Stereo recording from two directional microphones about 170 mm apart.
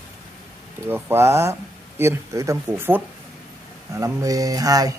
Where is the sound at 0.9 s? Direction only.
15° right (ahead or behind).